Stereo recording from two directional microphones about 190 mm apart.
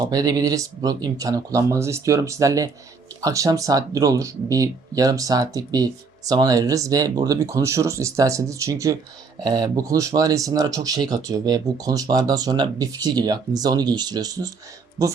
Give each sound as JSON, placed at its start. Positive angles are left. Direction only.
{"t": 0.0, "sound": "speech", "side_deg": -20}